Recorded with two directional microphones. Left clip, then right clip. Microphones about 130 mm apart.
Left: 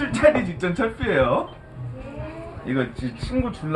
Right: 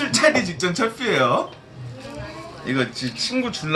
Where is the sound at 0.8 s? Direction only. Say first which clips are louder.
Even; 15° right (ahead or behind).